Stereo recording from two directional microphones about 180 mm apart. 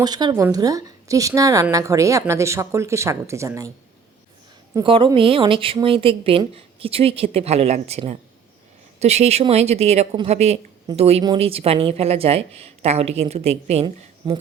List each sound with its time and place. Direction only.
0.0 s a woman's voice: 25° right (ahead or behind)
4.8 s speech: 30° right (ahead or behind)